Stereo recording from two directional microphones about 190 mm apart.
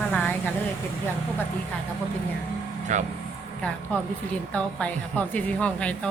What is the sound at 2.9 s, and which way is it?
Speech, 40° right (ahead or behind).